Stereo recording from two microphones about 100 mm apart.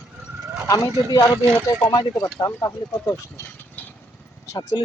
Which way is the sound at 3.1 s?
25° left (ahead or behind).